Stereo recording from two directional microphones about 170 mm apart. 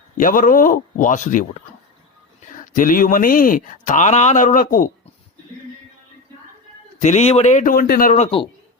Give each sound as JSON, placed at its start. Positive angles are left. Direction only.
{"t": 0.2, "sound": "speech", "side_deg": 50}
{"t": 7.0, "sound": "speech", "side_deg": 40}
{"t": 8.1, "sound": "speech", "side_deg": 35}